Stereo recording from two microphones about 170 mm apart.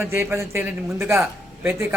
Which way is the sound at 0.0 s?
15° right (ahead or behind).